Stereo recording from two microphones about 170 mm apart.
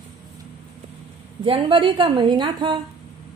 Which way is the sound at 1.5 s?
30° right (ahead or behind).